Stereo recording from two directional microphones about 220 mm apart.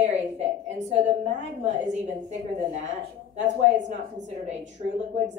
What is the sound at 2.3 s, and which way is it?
A woman's voice, 30° right (ahead or behind).